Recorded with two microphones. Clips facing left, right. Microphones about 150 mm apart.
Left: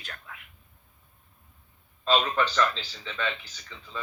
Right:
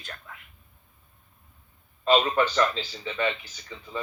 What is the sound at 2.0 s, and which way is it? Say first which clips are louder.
A man's voice: right 3 dB; 20° right (ahead or behind).